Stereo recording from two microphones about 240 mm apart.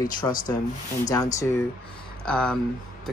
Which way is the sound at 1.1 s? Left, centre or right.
Centre.